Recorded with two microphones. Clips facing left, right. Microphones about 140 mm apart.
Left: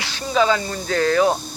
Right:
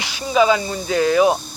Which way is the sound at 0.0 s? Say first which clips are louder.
Right 3 dB; 10° right (ahead or behind).